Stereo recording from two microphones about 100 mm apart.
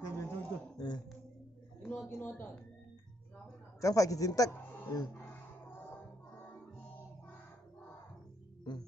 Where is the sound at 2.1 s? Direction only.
20° left (ahead or behind).